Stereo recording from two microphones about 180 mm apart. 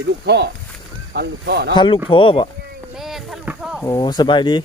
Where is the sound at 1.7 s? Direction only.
25° left (ahead or behind).